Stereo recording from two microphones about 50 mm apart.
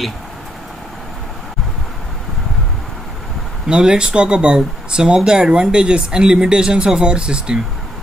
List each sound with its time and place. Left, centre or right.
3.6 s speech: centre